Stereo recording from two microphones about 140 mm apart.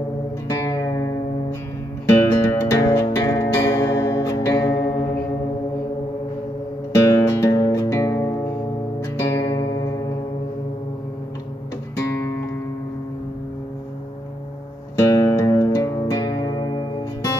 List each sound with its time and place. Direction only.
0.5 s music: 20° left (ahead or behind)
6.9 s music: 20° left (ahead or behind)
15.0 s music: 25° left (ahead or behind)